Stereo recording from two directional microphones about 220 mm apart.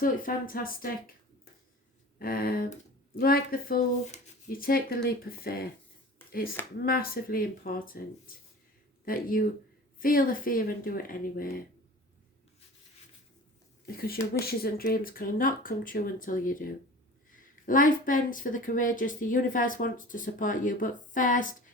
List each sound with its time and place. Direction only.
0.0 s speech: 40° left (ahead or behind)
2.1 s speech: 40° left (ahead or behind)
6.8 s speech: 40° left (ahead or behind)
9.0 s speech: 40° left (ahead or behind)
13.8 s speech: 40° left (ahead or behind)